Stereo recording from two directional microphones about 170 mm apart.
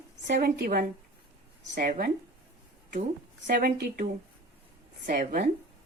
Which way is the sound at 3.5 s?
65° right (ahead or behind).